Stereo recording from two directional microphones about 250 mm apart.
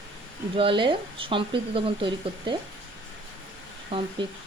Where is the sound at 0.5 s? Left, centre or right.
Centre.